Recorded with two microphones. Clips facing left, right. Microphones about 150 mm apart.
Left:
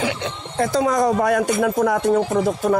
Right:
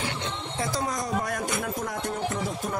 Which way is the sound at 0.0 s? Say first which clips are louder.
Left 7 dB; 90° left.